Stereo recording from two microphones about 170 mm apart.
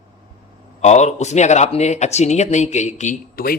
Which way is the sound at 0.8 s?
40° left (ahead or behind).